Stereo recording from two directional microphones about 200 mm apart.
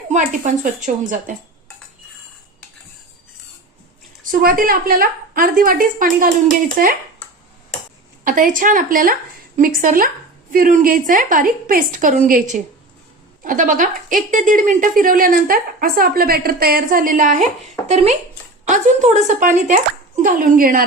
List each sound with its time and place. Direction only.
0.4 s a woman's voice: 40° right (ahead or behind)
4.2 s a woman's voice: 45° right (ahead or behind)
8.2 s a woman's voice: 45° right (ahead or behind)